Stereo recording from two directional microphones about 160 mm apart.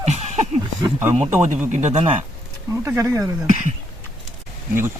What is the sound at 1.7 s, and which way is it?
Speech, 50° right (ahead or behind).